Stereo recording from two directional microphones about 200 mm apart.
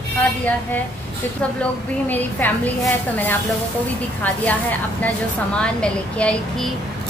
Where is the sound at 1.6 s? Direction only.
10° left (ahead or behind).